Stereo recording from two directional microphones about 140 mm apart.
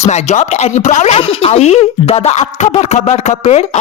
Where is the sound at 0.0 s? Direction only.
50° left (ahead or behind).